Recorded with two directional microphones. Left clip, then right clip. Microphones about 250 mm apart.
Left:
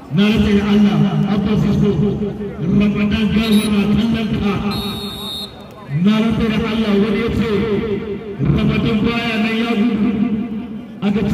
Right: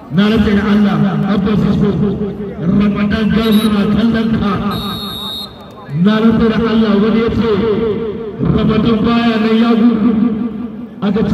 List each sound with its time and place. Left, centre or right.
0.1 s a man's voice: centre
6.0 s a man's voice: right